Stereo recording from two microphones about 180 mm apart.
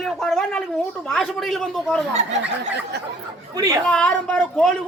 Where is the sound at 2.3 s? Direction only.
70° right (ahead or behind).